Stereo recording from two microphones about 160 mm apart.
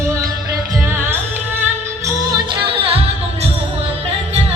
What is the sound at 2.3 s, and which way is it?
Music, 35° right (ahead or behind).